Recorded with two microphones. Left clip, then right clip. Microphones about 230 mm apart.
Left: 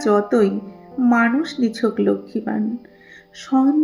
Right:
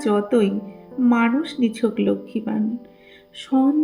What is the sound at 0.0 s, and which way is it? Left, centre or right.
Speech, centre.